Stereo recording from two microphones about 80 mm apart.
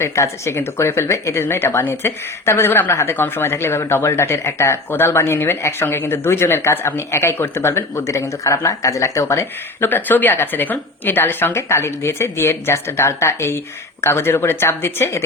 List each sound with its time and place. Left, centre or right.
0.0 s a woman's voice: left
9.9 s a woman's voice: left